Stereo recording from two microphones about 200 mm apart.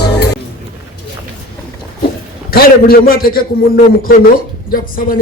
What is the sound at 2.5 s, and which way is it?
Speech, 50° left (ahead or behind).